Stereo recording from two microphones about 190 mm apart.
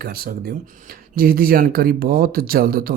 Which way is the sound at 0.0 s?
55° right (ahead or behind).